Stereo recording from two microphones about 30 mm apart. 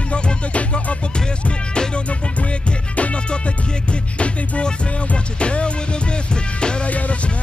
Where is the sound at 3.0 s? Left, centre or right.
Left.